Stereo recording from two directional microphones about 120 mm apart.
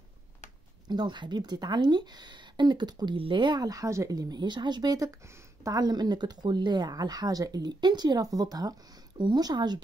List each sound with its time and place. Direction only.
0.8 s speech: 40° right (ahead or behind)